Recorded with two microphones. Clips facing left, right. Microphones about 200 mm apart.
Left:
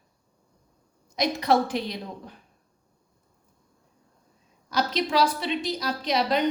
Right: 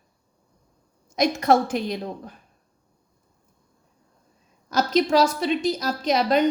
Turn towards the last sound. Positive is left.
turn(degrees=-45)  # may be behind; listen again after turning